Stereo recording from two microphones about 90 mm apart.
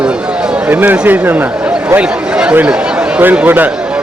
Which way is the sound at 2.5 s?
15° right (ahead or behind).